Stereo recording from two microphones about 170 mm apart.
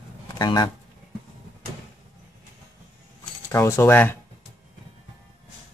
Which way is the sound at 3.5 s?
15° left (ahead or behind).